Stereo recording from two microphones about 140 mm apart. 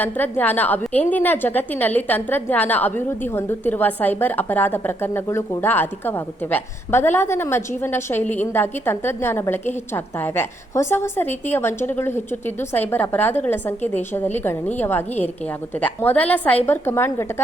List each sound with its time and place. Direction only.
0.0 s a woman's voice: 15° left (ahead or behind)